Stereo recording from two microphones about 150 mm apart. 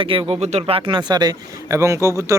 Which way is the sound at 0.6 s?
35° right (ahead or behind).